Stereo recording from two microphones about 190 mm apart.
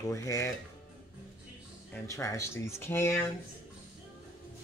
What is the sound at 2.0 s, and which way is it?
Speech, 15° left (ahead or behind).